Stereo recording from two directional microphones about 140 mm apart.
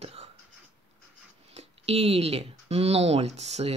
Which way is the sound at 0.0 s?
50° right (ahead or behind).